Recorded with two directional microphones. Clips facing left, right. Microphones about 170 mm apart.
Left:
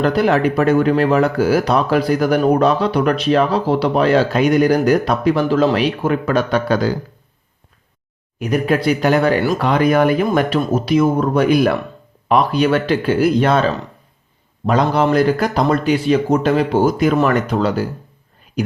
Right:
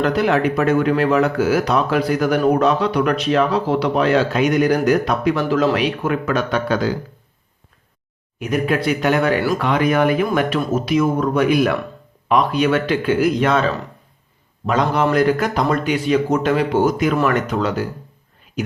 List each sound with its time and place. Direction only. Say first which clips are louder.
0.0 s speech: left 2 dB; 35° left (ahead or behind)
8.4 s speech: left 2 dB; 35° left (ahead or behind)
14.7 s speech: left 2 dB; 35° left (ahead or behind)